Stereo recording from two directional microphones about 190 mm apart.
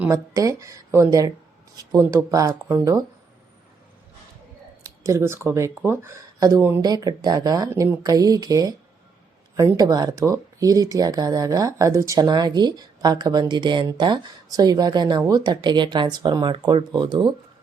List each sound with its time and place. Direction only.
0.0 s speech: 15° right (ahead or behind)
4.8 s speech: 15° right (ahead or behind)